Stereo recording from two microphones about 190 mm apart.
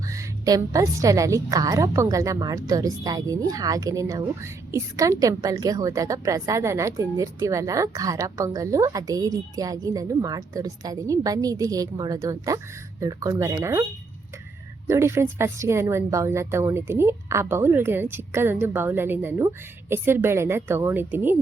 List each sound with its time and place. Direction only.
0.1 s a woman's voice: 15° right (ahead or behind)
14.8 s a woman's voice: 15° right (ahead or behind)